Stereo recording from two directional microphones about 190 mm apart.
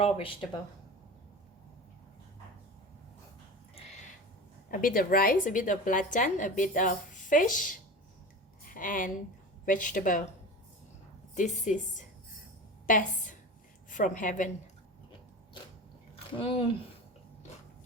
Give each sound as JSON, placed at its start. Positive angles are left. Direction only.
{"t": 0.0, "sound": "speech", "side_deg": 30}
{"t": 4.7, "sound": "a woman's voice", "side_deg": 45}
{"t": 11.3, "sound": "a woman's voice", "side_deg": 40}
{"t": 16.1, "sound": "speech", "side_deg": 30}